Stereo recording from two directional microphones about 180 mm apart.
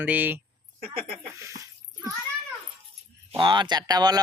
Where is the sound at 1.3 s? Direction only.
15° right (ahead or behind).